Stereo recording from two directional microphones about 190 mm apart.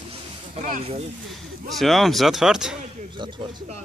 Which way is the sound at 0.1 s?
45° right (ahead or behind).